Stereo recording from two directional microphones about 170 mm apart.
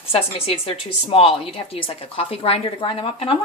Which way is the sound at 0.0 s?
35° left (ahead or behind).